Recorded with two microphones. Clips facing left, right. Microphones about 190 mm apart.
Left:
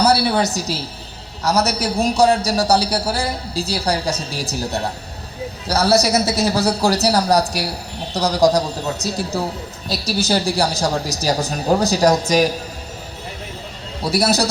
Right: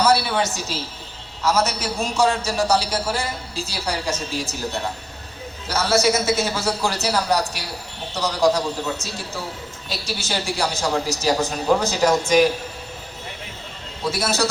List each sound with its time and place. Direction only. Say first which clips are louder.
0.0 s a sound: left 3 dB; 35° left (ahead or behind)
1.4 s a man's voice: left 2 dB; 40° left (ahead or behind)
14.0 s a man's voice: left 5 dB; 35° left (ahead or behind)